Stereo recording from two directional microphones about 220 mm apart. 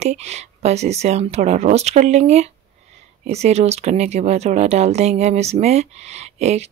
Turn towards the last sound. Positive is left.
turn(degrees=-30)  # may be behind; listen again after turning